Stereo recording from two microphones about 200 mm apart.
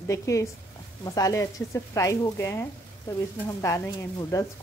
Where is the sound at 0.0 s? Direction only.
15° left (ahead or behind).